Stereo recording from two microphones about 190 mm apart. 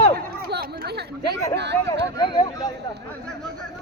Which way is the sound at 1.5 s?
65° right (ahead or behind).